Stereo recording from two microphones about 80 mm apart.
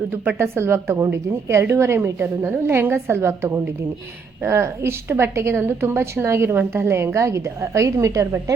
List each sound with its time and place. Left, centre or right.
0.1 s a woman's voice: right